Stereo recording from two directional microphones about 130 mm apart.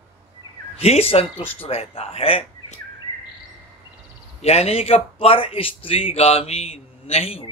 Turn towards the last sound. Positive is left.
turn(degrees=50)  # may be behind; listen again after turning